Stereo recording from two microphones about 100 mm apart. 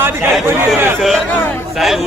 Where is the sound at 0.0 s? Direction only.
20° right (ahead or behind).